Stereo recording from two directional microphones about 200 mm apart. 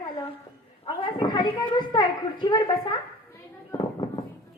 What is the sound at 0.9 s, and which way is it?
A child's voice, 20° left (ahead or behind).